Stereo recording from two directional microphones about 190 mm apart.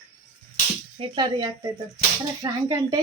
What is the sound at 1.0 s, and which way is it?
Speech, 25° right (ahead or behind).